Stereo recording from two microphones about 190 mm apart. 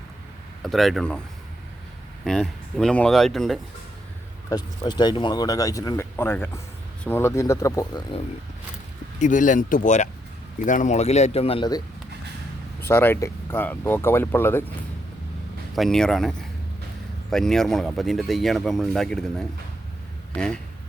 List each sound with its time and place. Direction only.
0.6 s speech: centre (ahead or behind)
2.2 s speech: 5° left (ahead or behind)
4.4 s speech: 20° left (ahead or behind)
9.1 s a man's voice: 40° left (ahead or behind); by 11.8 s 25° left (ahead or behind)
12.9 s speech: 10° left (ahead or behind)
15.7 s speech: centre (ahead or behind)